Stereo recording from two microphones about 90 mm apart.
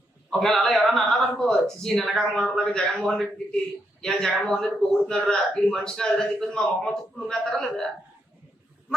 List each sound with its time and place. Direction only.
0.3 s speech: 5° left (ahead or behind)
4.4 s a man's voice: 10° left (ahead or behind)